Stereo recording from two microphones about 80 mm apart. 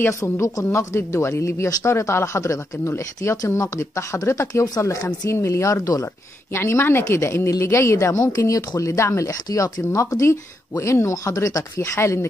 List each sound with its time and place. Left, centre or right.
0.2 s speech: left
0.7 s a woman's voice: left
6.5 s a woman's voice: left